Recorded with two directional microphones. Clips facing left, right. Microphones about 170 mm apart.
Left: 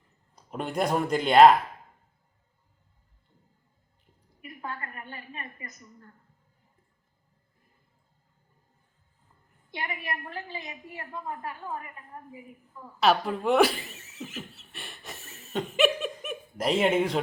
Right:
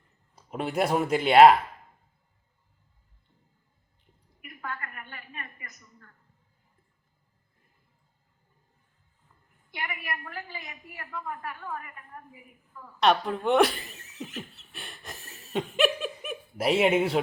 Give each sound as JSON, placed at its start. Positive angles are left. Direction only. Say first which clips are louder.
{"t": 0.3, "sound": "speech", "louder": "right 1 dB", "side_deg": -5}
{"t": 4.4, "sound": "a sound", "louder": "left 1 dB", "side_deg": 30}
{"t": 5.1, "sound": "a woman's voice", "louder": "left 2 dB", "side_deg": 30}
{"t": 9.7, "sound": "a woman's voice", "louder": "left 1 dB", "side_deg": 25}
{"t": 13.0, "sound": "speech", "louder": "even", "side_deg": 5}
{"t": 16.0, "sound": "chuckle", "louder": "left 1 dB", "side_deg": -5}